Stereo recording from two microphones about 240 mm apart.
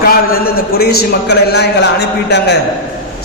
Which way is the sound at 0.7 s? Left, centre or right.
Left.